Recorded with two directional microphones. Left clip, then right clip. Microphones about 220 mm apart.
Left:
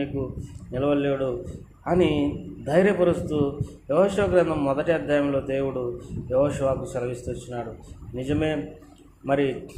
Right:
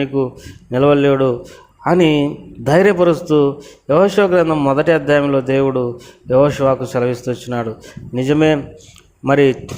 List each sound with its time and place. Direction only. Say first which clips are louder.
0.7 s a man's voice: right 11 dB; 45° right (ahead or behind)